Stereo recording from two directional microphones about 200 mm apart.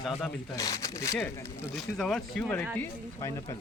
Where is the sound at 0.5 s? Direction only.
15° left (ahead or behind).